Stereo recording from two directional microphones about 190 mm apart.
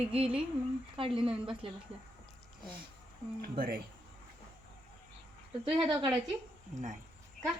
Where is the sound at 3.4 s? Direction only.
55° right (ahead or behind).